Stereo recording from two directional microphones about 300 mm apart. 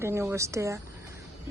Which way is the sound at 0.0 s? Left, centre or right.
Centre.